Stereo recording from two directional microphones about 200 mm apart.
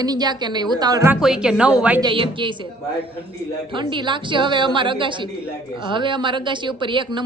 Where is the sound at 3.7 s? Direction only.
25° right (ahead or behind).